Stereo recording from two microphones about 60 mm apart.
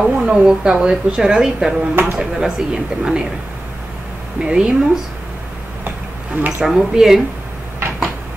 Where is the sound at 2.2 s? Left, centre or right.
Centre.